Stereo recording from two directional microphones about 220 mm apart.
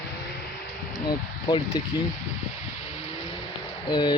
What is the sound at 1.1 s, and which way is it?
Speech, 20° left (ahead or behind).